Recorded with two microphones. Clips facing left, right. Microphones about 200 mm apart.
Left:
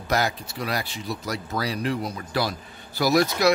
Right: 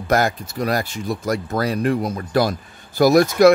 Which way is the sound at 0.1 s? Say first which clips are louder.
Right 6 dB; 45° right (ahead or behind).